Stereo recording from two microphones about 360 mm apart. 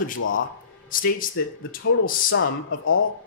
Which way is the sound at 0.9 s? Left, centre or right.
Left.